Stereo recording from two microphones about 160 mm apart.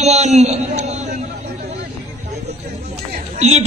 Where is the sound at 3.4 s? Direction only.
40° right (ahead or behind).